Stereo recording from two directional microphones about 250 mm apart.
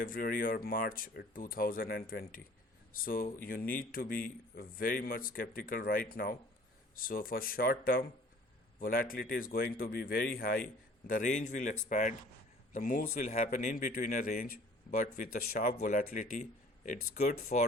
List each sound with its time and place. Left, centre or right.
0.0 s speech: left